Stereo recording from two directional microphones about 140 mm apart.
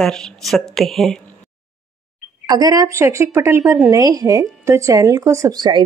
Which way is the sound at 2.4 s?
30° right (ahead or behind).